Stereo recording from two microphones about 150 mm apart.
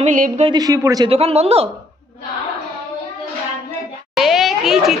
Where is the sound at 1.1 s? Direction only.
40° right (ahead or behind).